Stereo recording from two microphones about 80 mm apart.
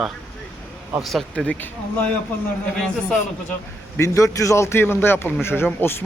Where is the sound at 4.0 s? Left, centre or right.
Left.